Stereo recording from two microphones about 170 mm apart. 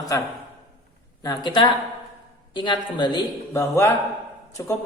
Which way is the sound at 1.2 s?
25° left (ahead or behind).